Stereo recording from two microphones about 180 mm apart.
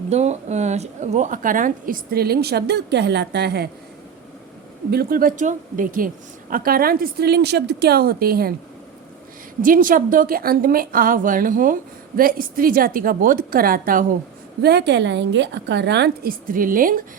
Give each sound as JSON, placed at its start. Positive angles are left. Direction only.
{"t": 0.1, "sound": "a woman's voice", "side_deg": -40}
{"t": 4.9, "sound": "a woman's voice", "side_deg": -55}
{"t": 9.6, "sound": "a woman's voice", "side_deg": -50}
{"t": 14.6, "sound": "a woman's voice", "side_deg": -65}